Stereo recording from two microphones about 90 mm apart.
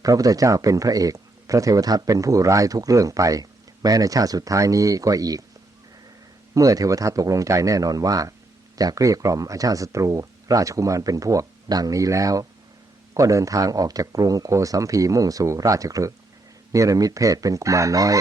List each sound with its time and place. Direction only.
0.0 s speech: 40° right (ahead or behind)
6.5 s speech: 40° right (ahead or behind)